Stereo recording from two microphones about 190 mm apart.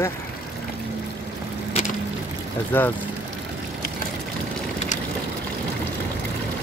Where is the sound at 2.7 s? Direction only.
10° left (ahead or behind).